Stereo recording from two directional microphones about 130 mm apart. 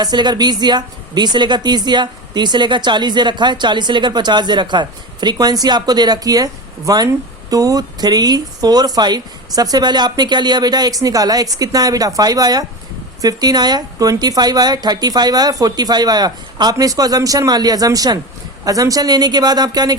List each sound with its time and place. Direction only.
0.0 s a woman's voice: 35° right (ahead or behind)